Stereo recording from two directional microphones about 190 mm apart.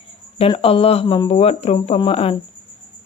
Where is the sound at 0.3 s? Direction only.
30° left (ahead or behind).